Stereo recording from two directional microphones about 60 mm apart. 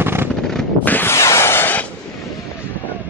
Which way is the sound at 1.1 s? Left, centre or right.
Left.